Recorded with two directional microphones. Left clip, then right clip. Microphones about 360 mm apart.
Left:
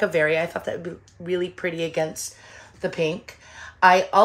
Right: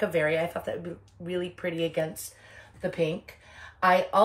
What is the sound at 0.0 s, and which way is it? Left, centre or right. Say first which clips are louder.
A woman's voice: left 5 dB; left.